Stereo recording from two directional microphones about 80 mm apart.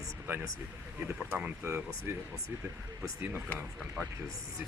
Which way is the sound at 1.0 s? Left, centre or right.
Centre.